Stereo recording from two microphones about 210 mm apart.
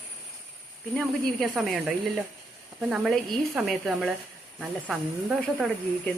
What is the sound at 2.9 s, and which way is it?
A man's voice, 5° right (ahead or behind).